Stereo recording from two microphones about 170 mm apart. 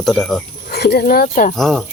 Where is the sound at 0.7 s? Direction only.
70° left (ahead or behind).